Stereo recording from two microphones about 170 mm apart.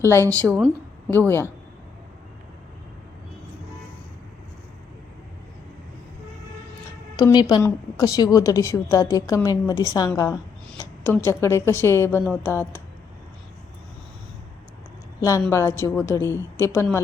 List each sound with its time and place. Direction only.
0.0 s a woman's voice: 15° left (ahead or behind)
7.2 s a woman's voice: 20° left (ahead or behind)
15.2 s a woman's voice: 20° left (ahead or behind)